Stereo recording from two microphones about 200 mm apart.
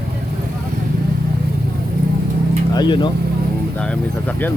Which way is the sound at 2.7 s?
20° left (ahead or behind).